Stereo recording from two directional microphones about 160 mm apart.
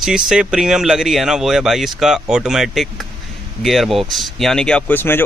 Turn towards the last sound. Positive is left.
turn(degrees=15)  # may be behind; listen again after turning